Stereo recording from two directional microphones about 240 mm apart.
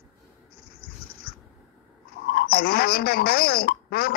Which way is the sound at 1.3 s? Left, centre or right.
Left.